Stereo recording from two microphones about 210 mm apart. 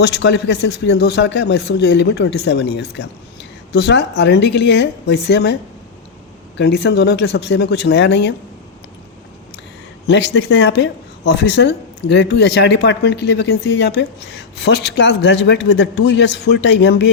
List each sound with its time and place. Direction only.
0.0 s a man's voice: 55° left (ahead or behind)
6.6 s a man's voice: 55° left (ahead or behind)
10.1 s speech: 55° left (ahead or behind)